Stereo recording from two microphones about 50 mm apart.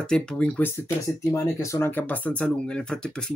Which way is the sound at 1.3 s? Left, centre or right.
Left.